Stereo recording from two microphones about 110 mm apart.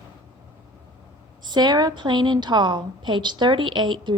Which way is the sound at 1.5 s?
40° right (ahead or behind).